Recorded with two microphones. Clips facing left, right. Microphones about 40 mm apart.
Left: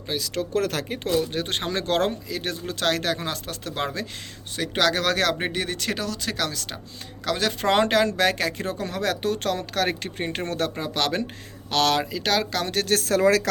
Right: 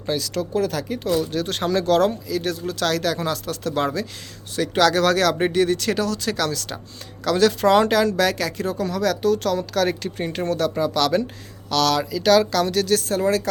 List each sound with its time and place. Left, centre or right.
0.1 s speech: centre
0.5 s speech: left
0.9 s speech: left
2.3 s speech: left
7.7 s speech: left
12.2 s speech: centre
12.6 s speech: left
13.1 s speech: left